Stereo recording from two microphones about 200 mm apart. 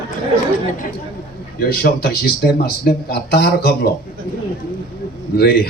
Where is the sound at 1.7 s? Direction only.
55° left (ahead or behind).